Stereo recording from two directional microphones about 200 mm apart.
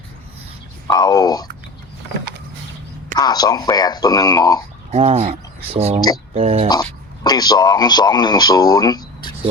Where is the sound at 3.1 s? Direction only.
20° left (ahead or behind).